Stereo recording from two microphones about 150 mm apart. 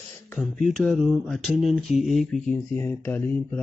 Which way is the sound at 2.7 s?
15° left (ahead or behind).